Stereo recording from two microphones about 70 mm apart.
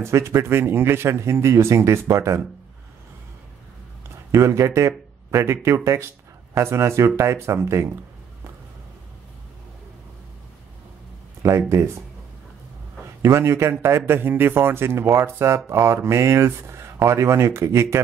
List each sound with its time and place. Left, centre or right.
0.0 s a man's voice: right
4.3 s a man's voice: right
11.4 s speech: right
13.2 s a man's voice: right